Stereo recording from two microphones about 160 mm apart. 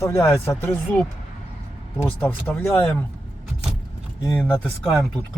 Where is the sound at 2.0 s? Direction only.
10° left (ahead or behind).